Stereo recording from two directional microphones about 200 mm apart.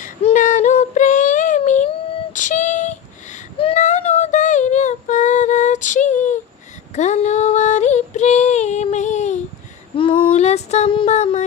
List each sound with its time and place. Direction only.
0.0 s child singing: 35° left (ahead or behind)
2.3 s a sound: 40° left (ahead or behind)
6.9 s female singing: 35° left (ahead or behind)